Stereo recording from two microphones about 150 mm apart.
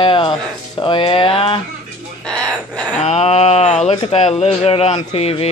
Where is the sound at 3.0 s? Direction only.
45° left (ahead or behind).